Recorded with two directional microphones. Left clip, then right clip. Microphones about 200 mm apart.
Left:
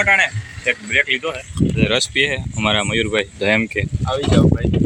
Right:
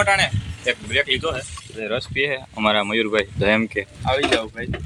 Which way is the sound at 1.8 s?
30° left (ahead or behind).